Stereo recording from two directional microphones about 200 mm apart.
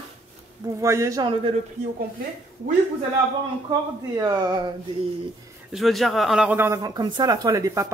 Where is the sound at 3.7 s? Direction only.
20° right (ahead or behind).